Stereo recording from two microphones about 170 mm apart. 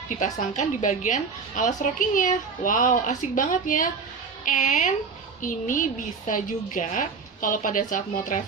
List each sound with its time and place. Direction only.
0.2 s a woman's voice: 45° left (ahead or behind)